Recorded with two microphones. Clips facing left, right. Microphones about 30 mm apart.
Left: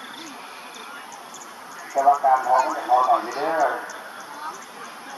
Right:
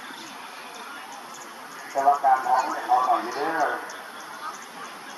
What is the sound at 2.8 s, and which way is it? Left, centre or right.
Speech, centre.